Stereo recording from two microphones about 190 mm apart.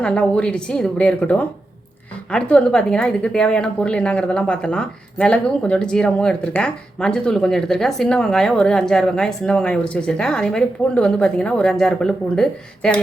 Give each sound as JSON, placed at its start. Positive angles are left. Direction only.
{"t": 0.0, "sound": "a woman's voice", "side_deg": 5}